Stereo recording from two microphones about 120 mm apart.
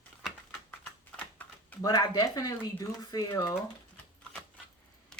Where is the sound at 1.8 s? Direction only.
35° left (ahead or behind).